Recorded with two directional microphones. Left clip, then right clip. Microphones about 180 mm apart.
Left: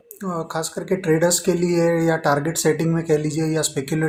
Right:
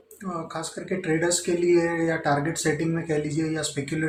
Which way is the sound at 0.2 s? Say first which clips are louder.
Left 6 dB; 45° left (ahead or behind).